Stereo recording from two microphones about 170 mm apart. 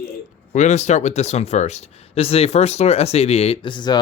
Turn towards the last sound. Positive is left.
turn(degrees=25)  # may be behind; listen again after turning